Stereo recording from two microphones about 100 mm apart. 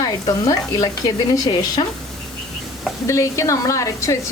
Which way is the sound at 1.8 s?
60° left (ahead or behind).